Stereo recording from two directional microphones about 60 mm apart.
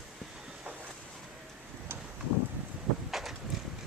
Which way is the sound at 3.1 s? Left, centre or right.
Centre.